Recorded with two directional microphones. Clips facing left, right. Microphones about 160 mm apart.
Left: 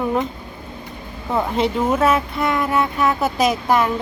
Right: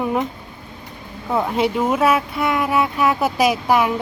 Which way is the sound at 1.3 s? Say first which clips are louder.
Even; 5° right (ahead or behind).